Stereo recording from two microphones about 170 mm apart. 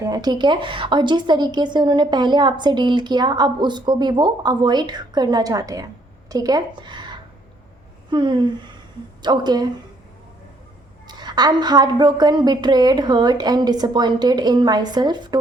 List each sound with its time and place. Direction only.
0.0 s a woman's voice: 25° right (ahead or behind)
11.2 s a woman's voice: 25° right (ahead or behind)